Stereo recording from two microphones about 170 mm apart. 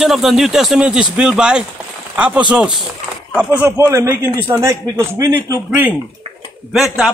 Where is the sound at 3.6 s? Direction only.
15° right (ahead or behind).